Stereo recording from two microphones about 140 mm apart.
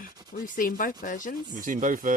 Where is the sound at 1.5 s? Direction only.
70° right (ahead or behind).